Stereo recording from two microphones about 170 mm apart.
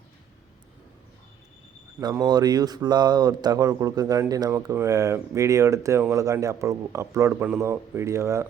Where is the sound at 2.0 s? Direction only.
20° right (ahead or behind).